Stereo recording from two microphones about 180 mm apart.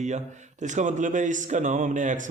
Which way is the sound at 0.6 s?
45° right (ahead or behind).